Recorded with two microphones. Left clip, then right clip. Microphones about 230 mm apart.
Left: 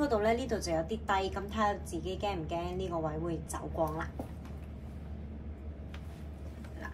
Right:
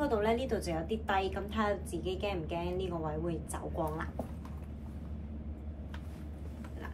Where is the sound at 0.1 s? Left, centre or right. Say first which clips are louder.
Left 1 dB; centre.